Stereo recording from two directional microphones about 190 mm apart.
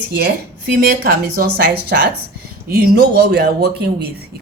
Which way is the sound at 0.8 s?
55° right (ahead or behind).